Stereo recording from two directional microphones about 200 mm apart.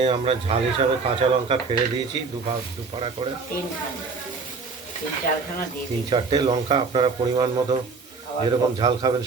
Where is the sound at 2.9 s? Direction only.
25° right (ahead or behind).